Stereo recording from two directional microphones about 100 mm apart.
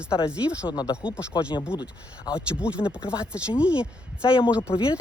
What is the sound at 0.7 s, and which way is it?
Speech, 40° left (ahead or behind).